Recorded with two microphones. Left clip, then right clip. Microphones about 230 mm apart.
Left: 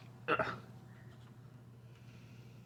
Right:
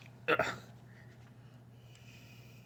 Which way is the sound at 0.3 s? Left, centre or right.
Centre.